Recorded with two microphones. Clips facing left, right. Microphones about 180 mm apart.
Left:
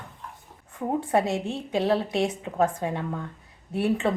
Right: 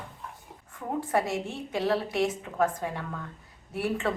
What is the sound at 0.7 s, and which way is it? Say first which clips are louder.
A woman's voice: left 4 dB; 25° left (ahead or behind).